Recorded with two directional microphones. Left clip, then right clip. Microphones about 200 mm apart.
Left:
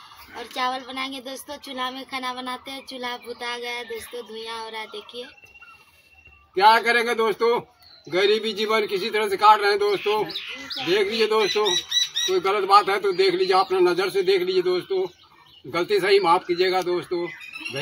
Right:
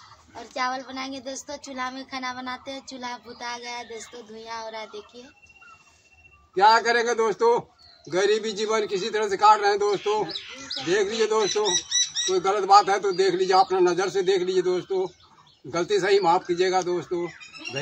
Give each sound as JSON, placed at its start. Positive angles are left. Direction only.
{"t": 0.6, "sound": "speech", "side_deg": -20}
{"t": 6.5, "sound": "a man's voice", "side_deg": 0}
{"t": 11.6, "sound": "bird", "side_deg": -20}
{"t": 12.3, "sound": "a man's voice", "side_deg": -5}